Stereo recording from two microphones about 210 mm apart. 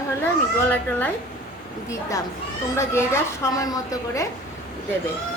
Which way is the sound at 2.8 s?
10° left (ahead or behind).